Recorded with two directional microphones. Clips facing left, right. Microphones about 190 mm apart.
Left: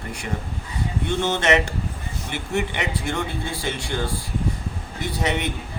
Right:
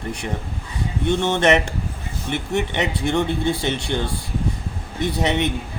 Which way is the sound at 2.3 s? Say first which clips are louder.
Right 3 dB; 20° right (ahead or behind).